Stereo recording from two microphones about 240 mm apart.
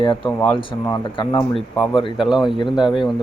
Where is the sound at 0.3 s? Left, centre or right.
Centre.